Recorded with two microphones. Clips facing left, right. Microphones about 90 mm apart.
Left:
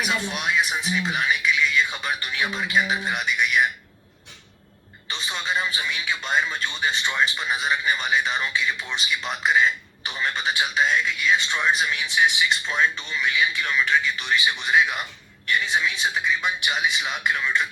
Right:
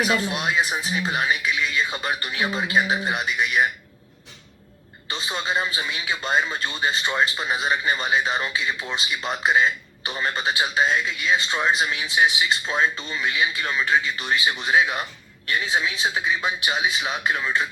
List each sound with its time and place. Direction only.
0.0 s speech: 40° right (ahead or behind)
5.1 s speech: 40° right (ahead or behind)
16.2 s speech: 40° right (ahead or behind)